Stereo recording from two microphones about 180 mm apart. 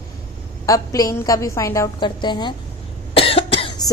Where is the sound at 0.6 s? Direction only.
20° left (ahead or behind).